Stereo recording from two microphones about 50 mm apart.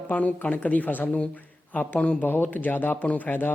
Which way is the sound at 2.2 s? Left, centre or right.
Left.